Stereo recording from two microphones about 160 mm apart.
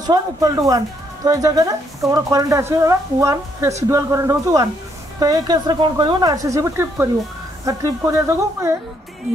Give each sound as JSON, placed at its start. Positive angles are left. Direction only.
{"t": 0.0, "sound": "a woman's voice", "side_deg": -25}